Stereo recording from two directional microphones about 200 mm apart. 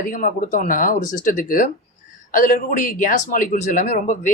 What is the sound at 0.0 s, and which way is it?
A man's voice, 40° left (ahead or behind).